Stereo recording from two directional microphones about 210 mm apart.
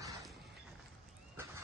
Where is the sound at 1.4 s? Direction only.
10° right (ahead or behind).